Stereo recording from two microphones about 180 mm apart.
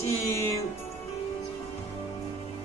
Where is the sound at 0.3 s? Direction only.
15° left (ahead or behind).